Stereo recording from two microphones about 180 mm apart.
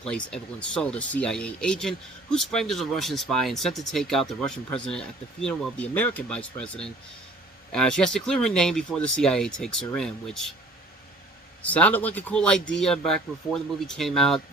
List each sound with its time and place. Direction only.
0.0 s speech: 5° left (ahead or behind)
11.6 s speech: 10° left (ahead or behind)